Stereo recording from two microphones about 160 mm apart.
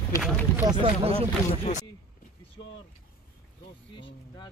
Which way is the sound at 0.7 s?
30° right (ahead or behind).